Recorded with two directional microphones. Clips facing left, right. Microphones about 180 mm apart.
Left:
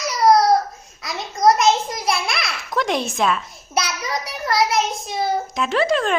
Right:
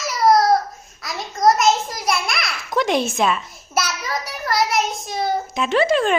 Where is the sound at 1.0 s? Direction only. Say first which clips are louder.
Even; centre (ahead or behind).